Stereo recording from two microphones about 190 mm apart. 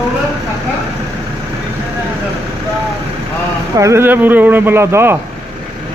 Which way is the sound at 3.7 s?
15° right (ahead or behind).